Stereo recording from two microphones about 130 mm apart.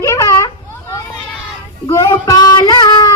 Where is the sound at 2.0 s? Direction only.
30° left (ahead or behind).